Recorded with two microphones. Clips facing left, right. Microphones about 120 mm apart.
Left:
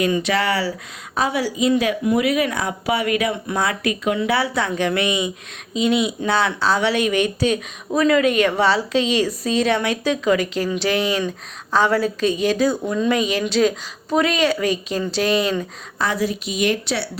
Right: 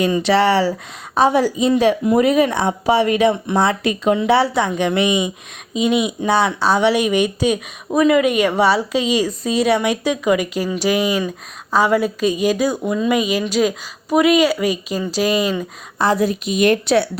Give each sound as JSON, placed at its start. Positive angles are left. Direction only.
{"t": 0.0, "sound": "speech", "side_deg": -30}
{"t": 1.2, "sound": "a woman's voice", "side_deg": -40}
{"t": 16.2, "sound": "speech", "side_deg": -50}